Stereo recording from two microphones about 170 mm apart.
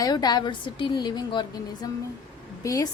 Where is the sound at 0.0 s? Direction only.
25° left (ahead or behind).